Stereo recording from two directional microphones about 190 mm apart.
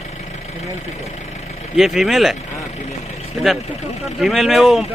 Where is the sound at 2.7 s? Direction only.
35° left (ahead or behind).